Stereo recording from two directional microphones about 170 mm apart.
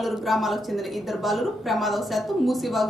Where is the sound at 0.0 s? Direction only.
Centre (ahead or behind).